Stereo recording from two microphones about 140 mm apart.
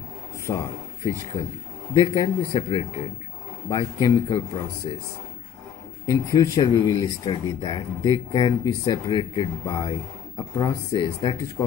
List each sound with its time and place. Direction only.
0.5 s a man's voice: 30° left (ahead or behind)
2.0 s speech: 30° left (ahead or behind)
6.0 s speech: 30° left (ahead or behind)